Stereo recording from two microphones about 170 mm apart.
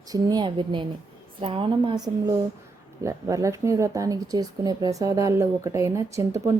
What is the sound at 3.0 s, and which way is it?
Speech, 20° right (ahead or behind).